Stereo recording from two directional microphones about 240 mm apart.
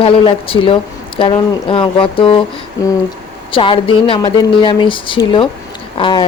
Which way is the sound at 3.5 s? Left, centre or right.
Left.